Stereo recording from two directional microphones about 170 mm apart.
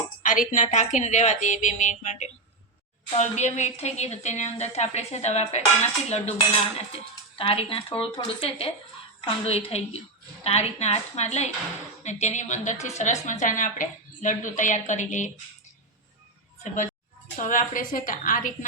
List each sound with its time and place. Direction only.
0.2 s a woman's voice: 50° left (ahead or behind)
17.4 s a woman's voice: 50° left (ahead or behind)